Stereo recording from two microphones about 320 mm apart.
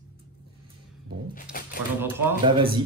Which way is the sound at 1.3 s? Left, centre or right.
Left.